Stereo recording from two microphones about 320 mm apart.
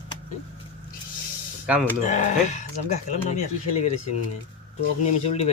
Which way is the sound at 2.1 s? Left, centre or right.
Left.